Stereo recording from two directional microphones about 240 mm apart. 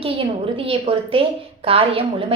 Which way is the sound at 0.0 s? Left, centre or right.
Right.